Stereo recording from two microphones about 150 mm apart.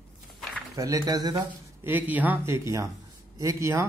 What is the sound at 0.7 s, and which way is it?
Speech, 25° right (ahead or behind).